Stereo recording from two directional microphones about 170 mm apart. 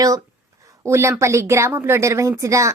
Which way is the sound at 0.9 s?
15° right (ahead or behind).